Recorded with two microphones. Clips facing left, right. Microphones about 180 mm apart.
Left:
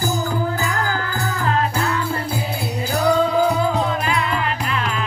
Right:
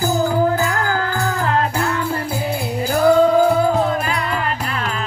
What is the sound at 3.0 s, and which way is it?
Music, 50° right (ahead or behind).